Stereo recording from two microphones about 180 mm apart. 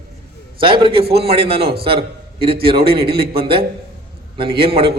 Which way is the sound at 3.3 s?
30° right (ahead or behind).